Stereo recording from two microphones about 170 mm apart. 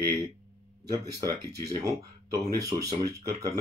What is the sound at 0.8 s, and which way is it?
Speech, 20° right (ahead or behind).